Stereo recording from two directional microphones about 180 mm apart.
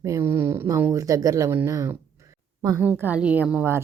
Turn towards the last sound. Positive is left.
turn(degrees=-10)  # may be behind; listen again after turning